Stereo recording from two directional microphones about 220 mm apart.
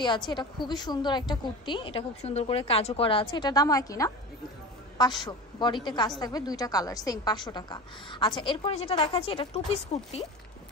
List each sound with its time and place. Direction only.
0.3 s a woman's voice: 20° left (ahead or behind)